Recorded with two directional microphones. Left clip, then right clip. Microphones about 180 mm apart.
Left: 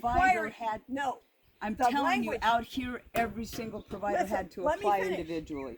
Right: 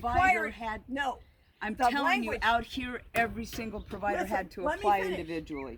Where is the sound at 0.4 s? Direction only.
60° left (ahead or behind).